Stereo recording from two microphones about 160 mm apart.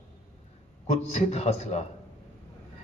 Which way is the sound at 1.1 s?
40° left (ahead or behind).